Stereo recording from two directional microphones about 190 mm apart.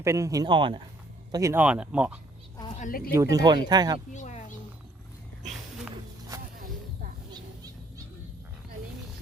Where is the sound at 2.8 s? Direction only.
50° left (ahead or behind).